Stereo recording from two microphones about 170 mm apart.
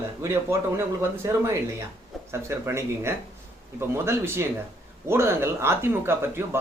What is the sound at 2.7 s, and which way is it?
Speech, 15° right (ahead or behind).